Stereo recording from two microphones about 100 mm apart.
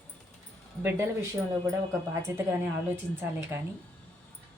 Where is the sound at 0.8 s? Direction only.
25° right (ahead or behind).